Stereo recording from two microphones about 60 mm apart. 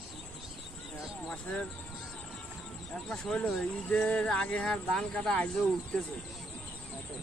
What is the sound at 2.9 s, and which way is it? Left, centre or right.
Speech, centre.